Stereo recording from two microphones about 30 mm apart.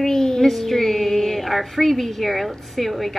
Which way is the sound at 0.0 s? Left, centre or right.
Centre.